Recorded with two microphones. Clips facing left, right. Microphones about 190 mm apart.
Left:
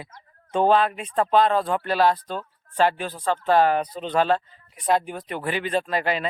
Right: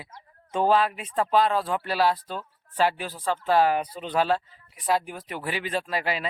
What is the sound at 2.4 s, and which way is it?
Speech, 5° right (ahead or behind).